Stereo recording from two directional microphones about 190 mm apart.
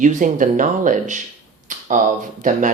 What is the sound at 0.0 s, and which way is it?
Speech, 40° right (ahead or behind).